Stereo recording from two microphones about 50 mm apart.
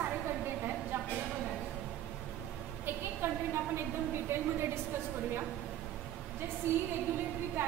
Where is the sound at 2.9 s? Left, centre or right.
Right.